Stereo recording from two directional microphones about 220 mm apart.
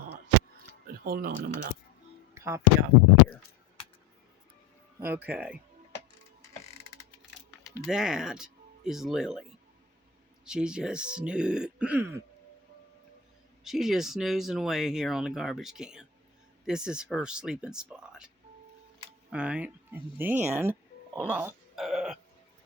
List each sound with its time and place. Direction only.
1.0 s speech: 40° right (ahead or behind)
2.3 s a sound: 10° right (ahead or behind)
4.9 s speech: 10° right (ahead or behind)
7.7 s speech: 5° right (ahead or behind)
10.4 s speech: 5° right (ahead or behind)
13.7 s speech: centre (ahead or behind)
19.3 s speech: 5° right (ahead or behind)
21.2 s a sound: 10° right (ahead or behind)